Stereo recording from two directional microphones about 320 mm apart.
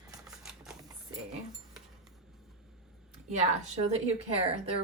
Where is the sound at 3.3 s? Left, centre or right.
Right.